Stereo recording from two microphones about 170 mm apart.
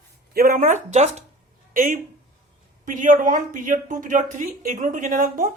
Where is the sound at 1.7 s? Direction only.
55° right (ahead or behind).